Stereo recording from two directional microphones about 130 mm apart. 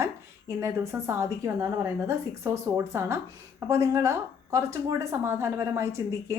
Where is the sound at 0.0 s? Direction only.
20° right (ahead or behind).